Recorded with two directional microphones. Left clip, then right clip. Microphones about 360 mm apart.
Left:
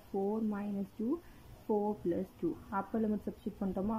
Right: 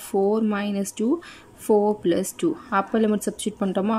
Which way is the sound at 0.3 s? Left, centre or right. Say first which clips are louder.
Right 14 dB; right.